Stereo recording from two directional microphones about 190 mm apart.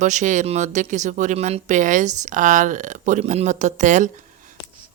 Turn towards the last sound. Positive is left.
turn(degrees=-40)  # may be behind; listen again after turning